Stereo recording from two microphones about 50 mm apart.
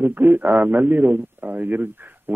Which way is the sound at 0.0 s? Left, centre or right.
Right.